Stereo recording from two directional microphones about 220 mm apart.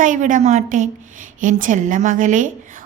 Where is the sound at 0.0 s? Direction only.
35° right (ahead or behind).